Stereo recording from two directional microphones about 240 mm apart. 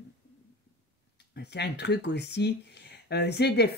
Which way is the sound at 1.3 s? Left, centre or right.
Left.